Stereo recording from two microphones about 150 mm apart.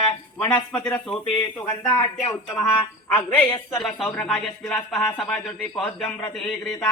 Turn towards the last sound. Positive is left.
turn(degrees=5)  # may be behind; listen again after turning